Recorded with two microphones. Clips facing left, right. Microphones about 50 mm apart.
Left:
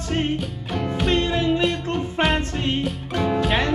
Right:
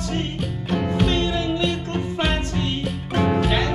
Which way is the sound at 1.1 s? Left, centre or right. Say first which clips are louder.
Left 2 dB; left.